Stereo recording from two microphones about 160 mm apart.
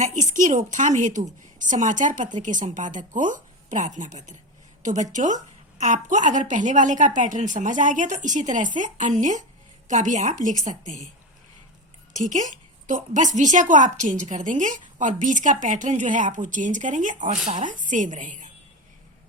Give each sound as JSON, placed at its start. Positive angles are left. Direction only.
{"t": 0.0, "sound": "a woman's voice", "side_deg": -50}
{"t": 12.1, "sound": "a woman's voice", "side_deg": -50}